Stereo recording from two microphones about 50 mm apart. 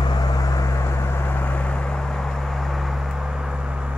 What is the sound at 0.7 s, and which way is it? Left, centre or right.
Vehicle, left.